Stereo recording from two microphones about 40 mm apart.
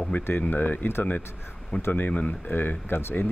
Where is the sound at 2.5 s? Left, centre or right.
Left.